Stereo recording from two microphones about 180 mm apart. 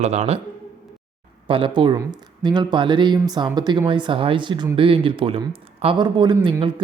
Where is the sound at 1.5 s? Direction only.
30° right (ahead or behind).